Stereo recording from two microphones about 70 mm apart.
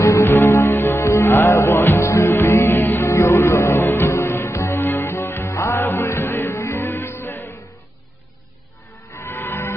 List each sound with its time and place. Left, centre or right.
0.0 s music: left
9.1 s music: left